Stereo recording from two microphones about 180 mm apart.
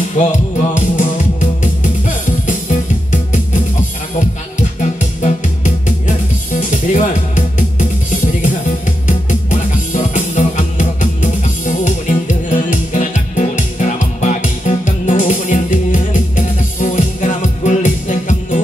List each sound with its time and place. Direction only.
0.2 s music: 45° left (ahead or behind)
5.2 s music: 40° left (ahead or behind)